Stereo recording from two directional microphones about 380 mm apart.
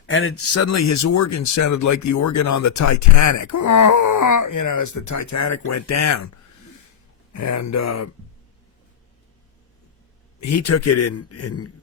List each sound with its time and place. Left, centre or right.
0.1 s speech: left
7.3 s speech: left
10.4 s a man's voice: left